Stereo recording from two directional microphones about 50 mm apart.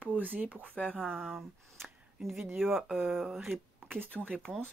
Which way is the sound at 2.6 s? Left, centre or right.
Centre.